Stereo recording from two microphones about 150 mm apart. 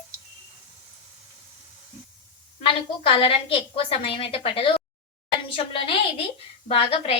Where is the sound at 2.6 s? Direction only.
35° left (ahead or behind).